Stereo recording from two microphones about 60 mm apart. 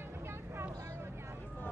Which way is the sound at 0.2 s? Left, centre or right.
Right.